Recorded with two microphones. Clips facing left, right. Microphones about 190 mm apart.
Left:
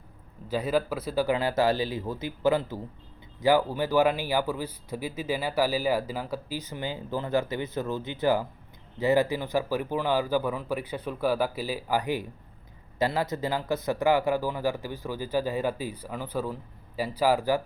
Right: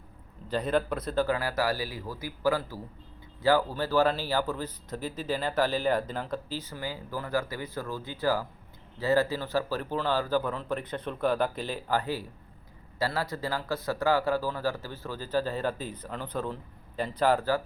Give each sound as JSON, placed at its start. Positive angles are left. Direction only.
{"t": 0.4, "sound": "a man's voice", "side_deg": 5}
{"t": 1.4, "sound": "a man's voice", "side_deg": 25}